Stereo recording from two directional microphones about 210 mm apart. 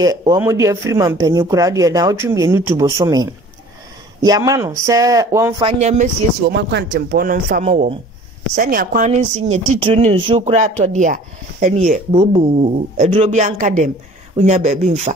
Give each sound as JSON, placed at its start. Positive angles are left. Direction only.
{"t": 0.0, "sound": "speech", "side_deg": -15}
{"t": 5.6, "sound": "a woman's voice", "side_deg": -30}
{"t": 6.5, "sound": "a woman's voice", "side_deg": -55}